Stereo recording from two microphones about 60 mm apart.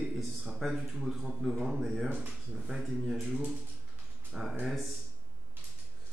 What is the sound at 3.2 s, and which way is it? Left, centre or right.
Speech, right.